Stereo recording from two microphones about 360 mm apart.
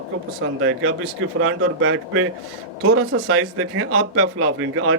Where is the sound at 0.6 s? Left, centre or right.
Right.